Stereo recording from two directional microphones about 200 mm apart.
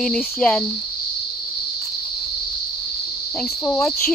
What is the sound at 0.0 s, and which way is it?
Cricket, 5° left (ahead or behind).